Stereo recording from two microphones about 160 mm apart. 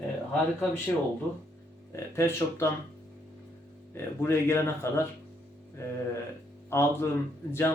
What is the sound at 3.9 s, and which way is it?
Speech, 15° left (ahead or behind).